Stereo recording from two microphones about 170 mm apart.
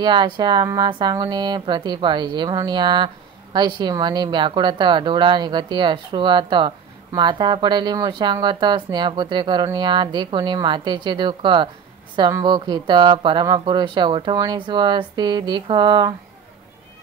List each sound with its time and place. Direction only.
0.0 s speech: 25° right (ahead or behind)